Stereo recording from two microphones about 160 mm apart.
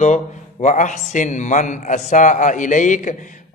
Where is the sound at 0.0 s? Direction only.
45° left (ahead or behind).